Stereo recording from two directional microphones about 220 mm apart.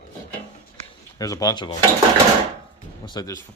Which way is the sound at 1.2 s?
15° left (ahead or behind).